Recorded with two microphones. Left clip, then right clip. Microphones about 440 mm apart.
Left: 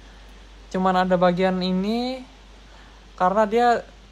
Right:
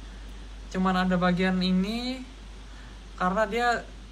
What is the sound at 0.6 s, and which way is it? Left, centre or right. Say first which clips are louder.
Speech: left 7 dB; centre.